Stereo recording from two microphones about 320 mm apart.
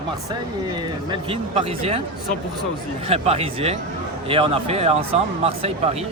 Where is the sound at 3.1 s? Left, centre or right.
Centre.